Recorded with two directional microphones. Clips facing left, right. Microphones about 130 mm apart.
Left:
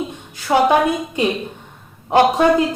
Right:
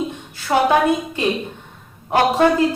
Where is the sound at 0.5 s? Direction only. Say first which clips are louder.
Left 2 dB; 15° left (ahead or behind).